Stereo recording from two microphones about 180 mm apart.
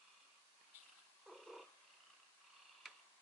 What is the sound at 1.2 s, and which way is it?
Purr, centre (ahead or behind).